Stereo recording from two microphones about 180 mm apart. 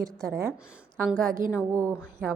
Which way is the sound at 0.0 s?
15° right (ahead or behind).